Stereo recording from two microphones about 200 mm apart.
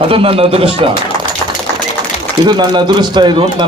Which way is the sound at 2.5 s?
20° right (ahead or behind).